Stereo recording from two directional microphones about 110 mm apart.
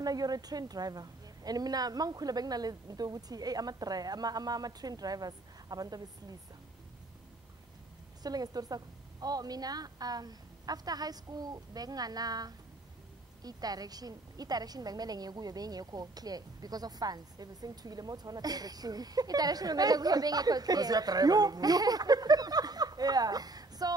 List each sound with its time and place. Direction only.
0.0 s a woman's voice: 35° right (ahead or behind)
8.2 s a woman's voice: 35° right (ahead or behind)